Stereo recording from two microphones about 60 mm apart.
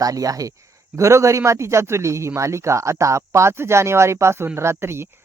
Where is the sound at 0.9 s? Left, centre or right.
Right.